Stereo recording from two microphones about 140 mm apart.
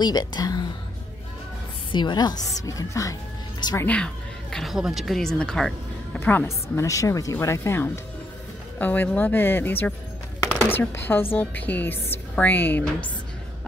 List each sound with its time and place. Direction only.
0.0 s speech: 30° left (ahead or behind)
1.9 s speech: 35° left (ahead or behind)
3.7 s speech: 10° left (ahead or behind)
6.1 s speech: 15° left (ahead or behind)